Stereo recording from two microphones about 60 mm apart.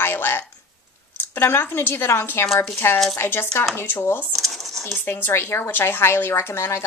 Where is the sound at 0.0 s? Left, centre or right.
Left.